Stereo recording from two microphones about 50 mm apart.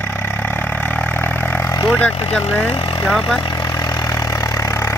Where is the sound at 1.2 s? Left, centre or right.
Left.